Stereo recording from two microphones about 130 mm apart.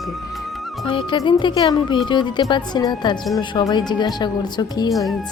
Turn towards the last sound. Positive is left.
turn(degrees=35)  # may be behind; listen again after turning